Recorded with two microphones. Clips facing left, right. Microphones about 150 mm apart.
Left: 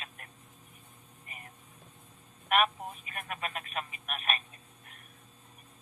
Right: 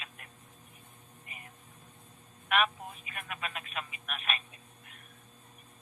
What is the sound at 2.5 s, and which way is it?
Speech, 40° left (ahead or behind).